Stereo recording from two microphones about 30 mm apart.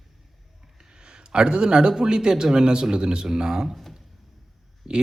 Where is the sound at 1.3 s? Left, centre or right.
Right.